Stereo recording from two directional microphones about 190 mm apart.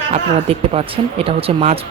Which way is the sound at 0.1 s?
30° right (ahead or behind).